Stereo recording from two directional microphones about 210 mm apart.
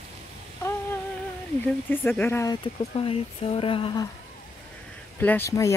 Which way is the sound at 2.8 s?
30° left (ahead or behind).